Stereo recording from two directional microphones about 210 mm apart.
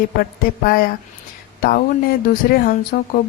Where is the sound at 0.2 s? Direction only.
45° left (ahead or behind).